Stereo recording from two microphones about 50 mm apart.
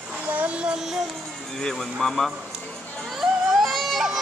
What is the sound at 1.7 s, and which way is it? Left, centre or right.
Speech, centre.